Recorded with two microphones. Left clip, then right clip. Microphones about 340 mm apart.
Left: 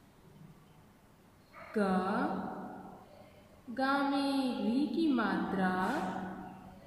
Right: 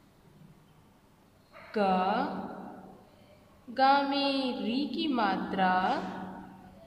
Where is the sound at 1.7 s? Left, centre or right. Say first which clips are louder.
Right 6 dB; right.